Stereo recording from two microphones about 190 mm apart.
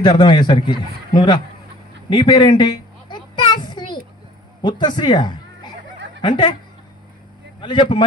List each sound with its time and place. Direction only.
0.0 s a man's voice: 25° left (ahead or behind)
2.0 s a sound: 25° left (ahead or behind)
4.6 s a man's voice: 25° left (ahead or behind)
7.6 s a man's voice: 25° left (ahead or behind)